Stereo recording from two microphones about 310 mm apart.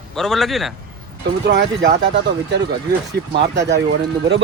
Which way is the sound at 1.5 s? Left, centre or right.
Right.